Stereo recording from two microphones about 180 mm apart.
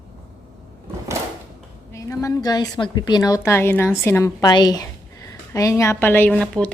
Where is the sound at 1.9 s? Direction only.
15° left (ahead or behind).